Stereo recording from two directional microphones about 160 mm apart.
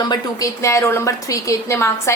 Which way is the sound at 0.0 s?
25° left (ahead or behind).